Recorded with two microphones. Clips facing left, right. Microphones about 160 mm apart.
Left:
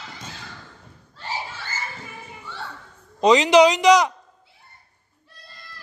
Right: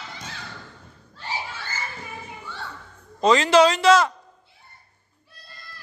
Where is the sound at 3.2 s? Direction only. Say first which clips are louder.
Left 2 dB; 15° left (ahead or behind).